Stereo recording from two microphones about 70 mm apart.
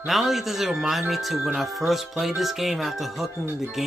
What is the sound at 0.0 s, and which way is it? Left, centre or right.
Speech, centre.